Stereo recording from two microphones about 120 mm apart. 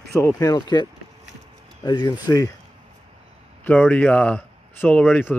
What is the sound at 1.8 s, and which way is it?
Speech, 35° left (ahead or behind).